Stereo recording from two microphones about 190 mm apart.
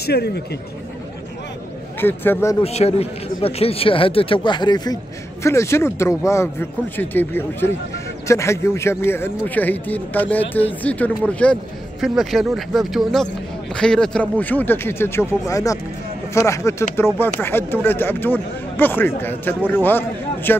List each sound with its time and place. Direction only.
0.0 s speech: 60° left (ahead or behind)
2.0 s speech: 10° left (ahead or behind)
2.6 s a man's voice: 35° left (ahead or behind); by 20.5 s 10° left (ahead or behind)